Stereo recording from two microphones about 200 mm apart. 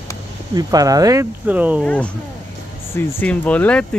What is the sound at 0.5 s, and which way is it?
Speech, 20° right (ahead or behind).